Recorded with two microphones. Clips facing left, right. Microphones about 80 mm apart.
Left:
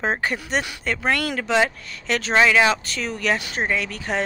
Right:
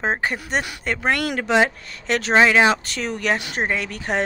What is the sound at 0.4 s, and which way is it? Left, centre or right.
Speech, right.